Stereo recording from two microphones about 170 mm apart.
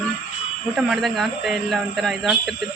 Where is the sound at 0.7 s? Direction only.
Centre (ahead or behind).